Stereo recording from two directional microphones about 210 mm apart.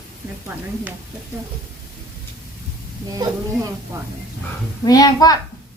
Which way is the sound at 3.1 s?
15° right (ahead or behind).